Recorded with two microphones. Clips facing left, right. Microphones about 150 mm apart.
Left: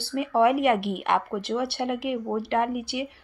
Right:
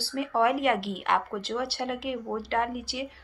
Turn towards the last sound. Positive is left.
turn(degrees=20)  # may be behind; listen again after turning